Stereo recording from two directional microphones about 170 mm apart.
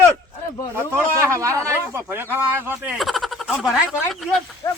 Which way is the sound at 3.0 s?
Centre (ahead or behind).